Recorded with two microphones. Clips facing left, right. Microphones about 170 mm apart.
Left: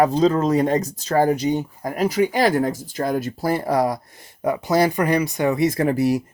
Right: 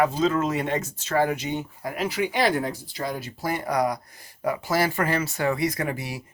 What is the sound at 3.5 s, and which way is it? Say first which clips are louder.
Speech: left 4 dB; 30° left (ahead or behind).